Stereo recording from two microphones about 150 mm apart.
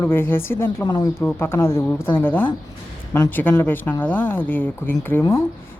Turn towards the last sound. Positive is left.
turn(degrees=15)  # may be behind; listen again after turning